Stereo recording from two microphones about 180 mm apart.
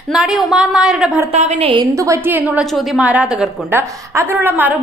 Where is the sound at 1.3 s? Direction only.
35° right (ahead or behind).